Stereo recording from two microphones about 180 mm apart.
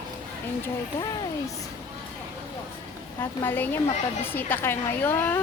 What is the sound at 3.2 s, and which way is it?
A woman's voice, 10° left (ahead or behind).